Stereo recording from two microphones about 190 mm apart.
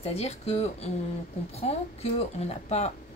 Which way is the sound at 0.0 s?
35° left (ahead or behind).